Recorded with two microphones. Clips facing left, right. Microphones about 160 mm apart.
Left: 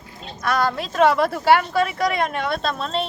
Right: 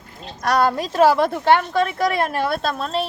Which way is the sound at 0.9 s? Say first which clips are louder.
Right 1 dB; centre (ahead or behind).